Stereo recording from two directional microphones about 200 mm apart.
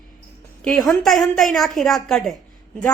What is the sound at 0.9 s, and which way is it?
Speech, centre (ahead or behind).